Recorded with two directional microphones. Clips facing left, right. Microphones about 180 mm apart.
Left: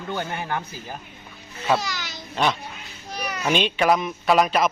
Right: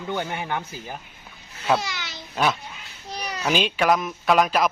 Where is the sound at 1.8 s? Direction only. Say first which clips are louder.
Left 1 dB; 25° right (ahead or behind).